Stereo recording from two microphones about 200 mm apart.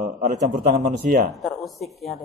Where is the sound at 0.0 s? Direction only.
35° right (ahead or behind).